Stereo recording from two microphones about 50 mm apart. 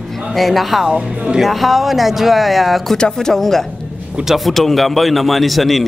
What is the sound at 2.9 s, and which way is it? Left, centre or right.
A man's voice, centre.